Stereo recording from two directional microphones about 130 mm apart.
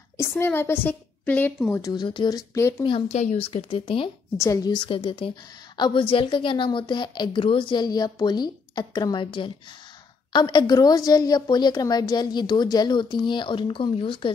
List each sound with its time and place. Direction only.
0.2 s a woman's voice: 15° left (ahead or behind)
1.7 s speech: 30° left (ahead or behind)
2.8 s a woman's voice: 40° left (ahead or behind)
3.2 s speech: 55° left (ahead or behind)
4.4 s speech: 25° left (ahead or behind)
4.7 s a woman's voice: 45° left (ahead or behind)